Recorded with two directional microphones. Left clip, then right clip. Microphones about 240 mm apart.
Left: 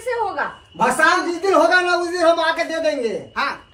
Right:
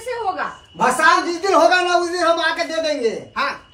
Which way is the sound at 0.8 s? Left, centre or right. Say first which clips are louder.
Right 1 dB; centre.